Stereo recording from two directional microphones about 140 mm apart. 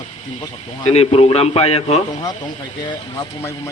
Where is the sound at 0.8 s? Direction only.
45° left (ahead or behind).